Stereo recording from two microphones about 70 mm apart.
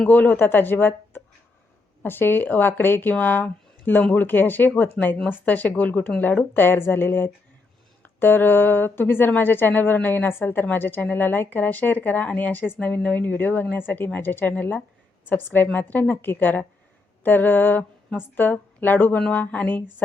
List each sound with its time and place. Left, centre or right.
0.1 s speech: left